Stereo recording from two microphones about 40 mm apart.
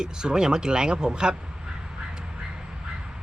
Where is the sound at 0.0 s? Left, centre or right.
Centre.